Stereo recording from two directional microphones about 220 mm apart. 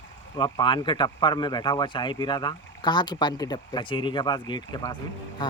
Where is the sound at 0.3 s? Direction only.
20° left (ahead or behind).